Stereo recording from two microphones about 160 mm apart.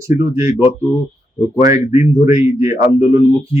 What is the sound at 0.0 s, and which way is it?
Speech, 20° right (ahead or behind).